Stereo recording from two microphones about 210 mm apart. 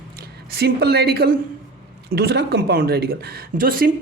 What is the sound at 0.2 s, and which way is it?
A woman's voice, 50° right (ahead or behind).